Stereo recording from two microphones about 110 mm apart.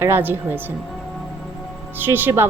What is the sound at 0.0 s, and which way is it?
Speech, 20° right (ahead or behind).